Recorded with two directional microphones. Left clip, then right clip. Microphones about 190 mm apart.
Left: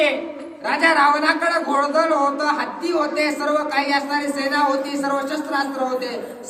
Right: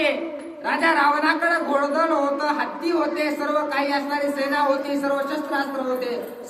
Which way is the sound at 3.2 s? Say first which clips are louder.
Left 3 dB; 15° left (ahead or behind).